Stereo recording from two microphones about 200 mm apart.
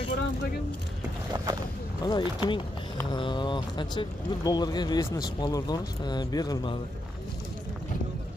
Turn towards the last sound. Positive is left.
turn(degrees=20)  # may be behind; listen again after turning